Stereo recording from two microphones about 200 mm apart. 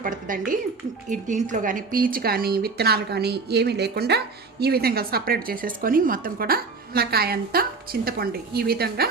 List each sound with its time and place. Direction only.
0.0 s a woman's voice: 40° right (ahead or behind)